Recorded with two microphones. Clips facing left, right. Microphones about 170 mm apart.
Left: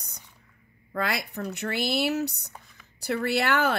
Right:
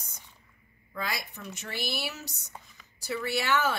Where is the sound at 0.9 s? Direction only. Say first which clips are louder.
Left 7 dB; 65° left (ahead or behind).